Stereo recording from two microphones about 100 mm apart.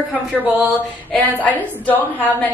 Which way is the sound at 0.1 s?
15° right (ahead or behind).